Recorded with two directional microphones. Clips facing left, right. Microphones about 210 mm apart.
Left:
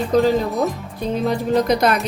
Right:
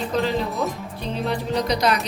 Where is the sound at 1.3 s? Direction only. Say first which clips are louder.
Left 5 dB; 50° left (ahead or behind).